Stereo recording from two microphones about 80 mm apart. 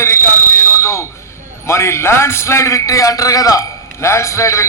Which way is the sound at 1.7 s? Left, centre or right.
Left.